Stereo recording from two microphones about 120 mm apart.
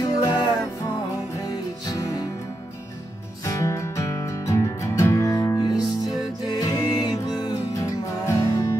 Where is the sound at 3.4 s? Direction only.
25° left (ahead or behind).